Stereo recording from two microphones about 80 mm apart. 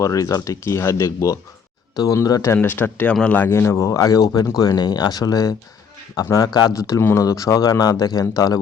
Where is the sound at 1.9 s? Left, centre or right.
Left.